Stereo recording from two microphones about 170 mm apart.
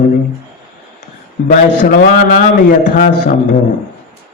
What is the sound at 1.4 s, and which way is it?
Speech, 45° left (ahead or behind).